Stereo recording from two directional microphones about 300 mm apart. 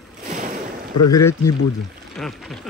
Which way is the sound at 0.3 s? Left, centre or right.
Right.